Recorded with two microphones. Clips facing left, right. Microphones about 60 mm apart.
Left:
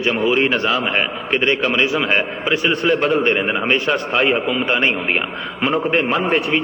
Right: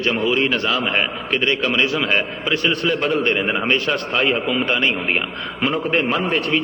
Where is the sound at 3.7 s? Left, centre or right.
Centre.